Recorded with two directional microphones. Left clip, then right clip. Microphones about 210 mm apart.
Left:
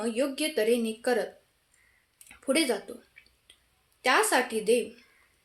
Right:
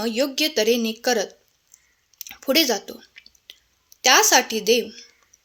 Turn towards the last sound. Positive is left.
turn(degrees=-40)  # may be behind; listen again after turning